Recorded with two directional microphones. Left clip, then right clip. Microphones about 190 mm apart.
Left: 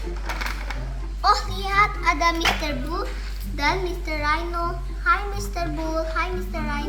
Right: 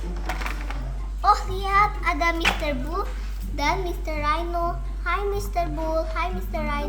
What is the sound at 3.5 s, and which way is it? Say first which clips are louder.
A child's voice: left 1 dB; 45° right (ahead or behind).